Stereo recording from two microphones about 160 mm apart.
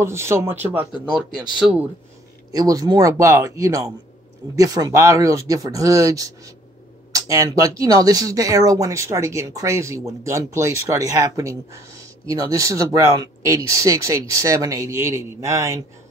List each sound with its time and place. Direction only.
0.0 s speech: 15° right (ahead or behind)
1.1 s speech: 5° right (ahead or behind)
2.5 s speech: 25° right (ahead or behind)